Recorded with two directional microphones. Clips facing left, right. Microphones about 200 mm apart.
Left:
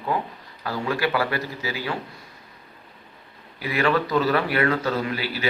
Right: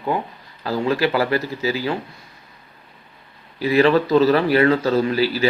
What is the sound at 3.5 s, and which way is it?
Speech, 30° right (ahead or behind).